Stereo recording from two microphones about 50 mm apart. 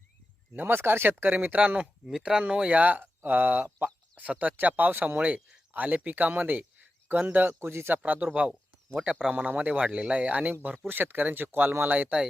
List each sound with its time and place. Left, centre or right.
0.5 s speech: right
1.2 s speech: right
2.0 s speech: centre
2.4 s speech: right
5.2 s speech: right
7.6 s speech: right
7.9 s speech: right
8.3 s speech: centre
9.3 s speech: right
9.6 s speech: right
10.5 s speech: right